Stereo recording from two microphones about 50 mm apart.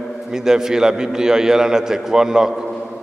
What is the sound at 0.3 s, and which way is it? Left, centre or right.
A man's voice, centre.